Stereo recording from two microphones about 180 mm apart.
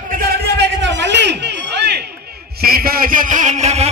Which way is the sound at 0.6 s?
75° right (ahead or behind).